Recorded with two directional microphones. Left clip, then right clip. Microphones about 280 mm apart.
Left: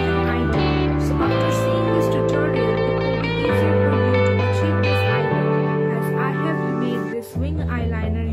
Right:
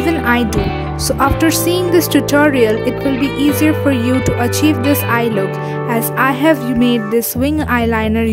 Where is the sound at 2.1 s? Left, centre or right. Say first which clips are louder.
Right 6 dB; right.